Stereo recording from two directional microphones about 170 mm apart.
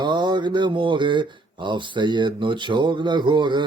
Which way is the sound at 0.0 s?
25° right (ahead or behind).